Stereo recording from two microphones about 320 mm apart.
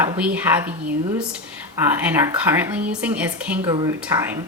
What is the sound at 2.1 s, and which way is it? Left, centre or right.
A woman's voice, centre.